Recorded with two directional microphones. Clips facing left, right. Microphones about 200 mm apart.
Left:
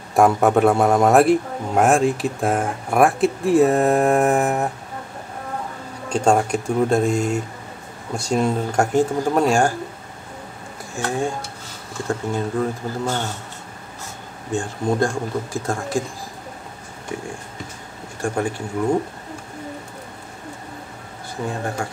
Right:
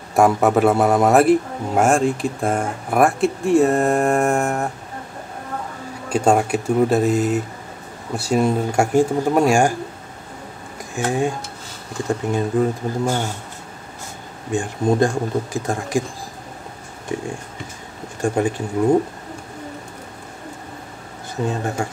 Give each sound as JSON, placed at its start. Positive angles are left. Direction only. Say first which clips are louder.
{"t": 0.1, "sound": "a man's voice", "louder": "even", "side_deg": 0}
{"t": 6.0, "sound": "a man's voice", "louder": "right 1 dB", "side_deg": -5}
{"t": 11.0, "sound": "speech", "louder": "right 3 dB", "side_deg": -15}
{"t": 14.5, "sound": "speech", "louder": "right 3 dB", "side_deg": -15}
{"t": 18.2, "sound": "speech", "louder": "right 3 dB", "side_deg": -20}
{"t": 21.5, "sound": "speech", "louder": "right 2 dB", "side_deg": -25}